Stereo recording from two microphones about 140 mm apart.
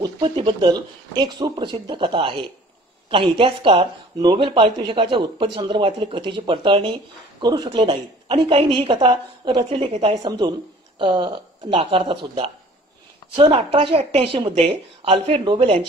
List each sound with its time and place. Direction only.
0.0 s speech: 35° right (ahead or behind)